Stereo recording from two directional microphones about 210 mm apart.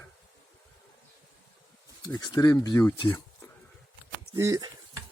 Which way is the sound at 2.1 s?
20° left (ahead or behind).